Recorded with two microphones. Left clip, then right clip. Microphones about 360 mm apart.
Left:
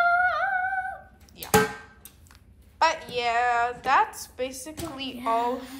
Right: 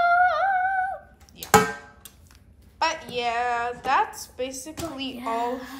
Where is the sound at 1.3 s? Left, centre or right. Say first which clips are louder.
Right 4 dB; centre.